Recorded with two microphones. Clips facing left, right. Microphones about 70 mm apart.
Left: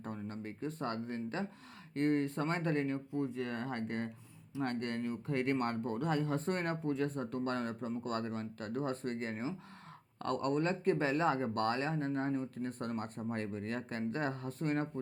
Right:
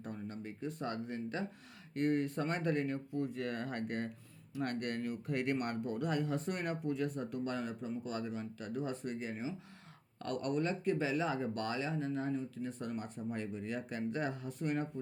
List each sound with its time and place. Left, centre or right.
0.0 s speech: left